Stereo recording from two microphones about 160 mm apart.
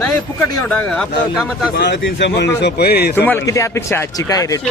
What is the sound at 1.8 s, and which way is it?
A man's voice, 90° left.